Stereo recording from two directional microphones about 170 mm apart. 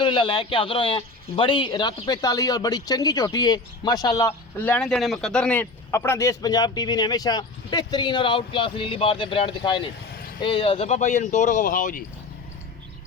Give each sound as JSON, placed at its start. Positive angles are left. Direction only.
{"t": 0.0, "sound": "a man's voice", "side_deg": 30}